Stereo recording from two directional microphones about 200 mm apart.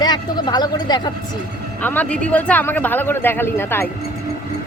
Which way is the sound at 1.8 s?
10° left (ahead or behind).